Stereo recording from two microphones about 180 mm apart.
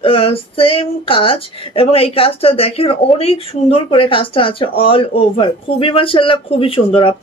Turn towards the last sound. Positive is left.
turn(degrees=30)  # may be behind; listen again after turning